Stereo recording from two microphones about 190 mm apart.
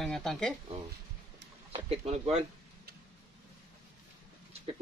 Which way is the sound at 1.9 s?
35° right (ahead or behind).